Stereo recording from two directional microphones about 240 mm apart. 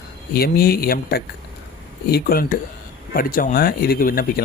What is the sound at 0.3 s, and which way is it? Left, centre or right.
Speech, left.